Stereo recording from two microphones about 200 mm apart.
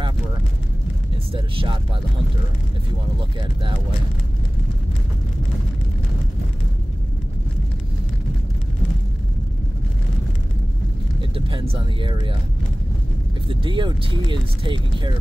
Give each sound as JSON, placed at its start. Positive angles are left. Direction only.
{"t": 1.1, "sound": "speech", "side_deg": -25}
{"t": 3.2, "sound": "speech", "side_deg": -25}
{"t": 11.1, "sound": "speech", "side_deg": -25}
{"t": 13.5, "sound": "speech", "side_deg": -25}